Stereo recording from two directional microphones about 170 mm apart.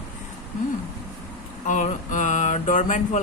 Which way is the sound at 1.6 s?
45° left (ahead or behind).